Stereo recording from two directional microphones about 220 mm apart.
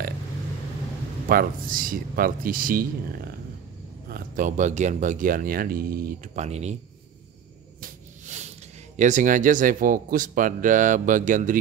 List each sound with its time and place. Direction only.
1.3 s speech: 40° right (ahead or behind)
4.1 s speech: 35° right (ahead or behind)
7.8 s a sound: 35° right (ahead or behind)
8.9 s speech: 35° right (ahead or behind)